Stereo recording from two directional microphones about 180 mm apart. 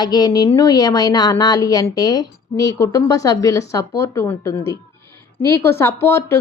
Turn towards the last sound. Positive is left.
turn(degrees=15)  # may be behind; listen again after turning